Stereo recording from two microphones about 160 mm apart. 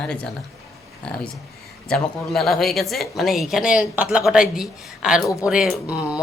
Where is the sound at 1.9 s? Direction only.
Centre (ahead or behind).